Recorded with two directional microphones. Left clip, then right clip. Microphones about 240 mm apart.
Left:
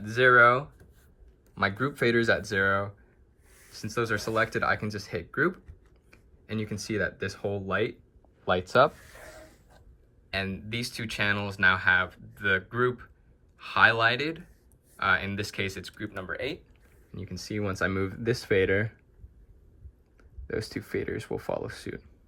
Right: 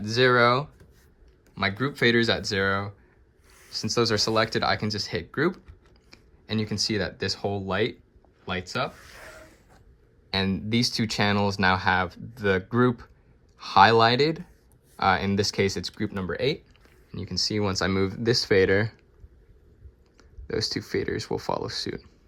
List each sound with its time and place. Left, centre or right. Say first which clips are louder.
0.0 s speech: left 1 dB; centre
8.4 s a sound: left 7 dB; centre
10.3 s speech: right 6 dB; centre
17.1 s speech: right 10 dB; centre
20.1 s speech: right 4 dB; centre